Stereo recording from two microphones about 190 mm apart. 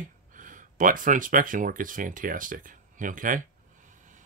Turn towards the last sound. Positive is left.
turn(degrees=-45)  # may be behind; listen again after turning